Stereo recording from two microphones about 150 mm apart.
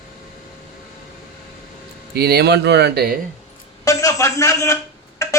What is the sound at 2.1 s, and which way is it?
Speech, 90° right.